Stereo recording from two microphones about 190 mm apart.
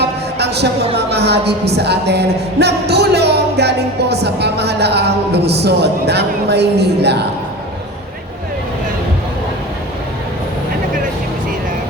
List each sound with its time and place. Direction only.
0.0 s a woman's voice: 60° right (ahead or behind)